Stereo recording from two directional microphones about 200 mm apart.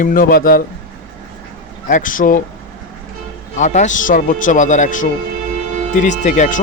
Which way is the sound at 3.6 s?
40° left (ahead or behind).